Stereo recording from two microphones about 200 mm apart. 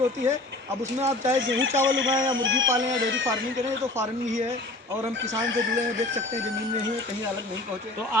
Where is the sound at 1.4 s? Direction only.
75° right (ahead or behind).